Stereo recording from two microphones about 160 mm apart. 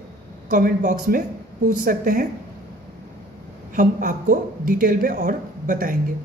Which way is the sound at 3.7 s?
60° right (ahead or behind).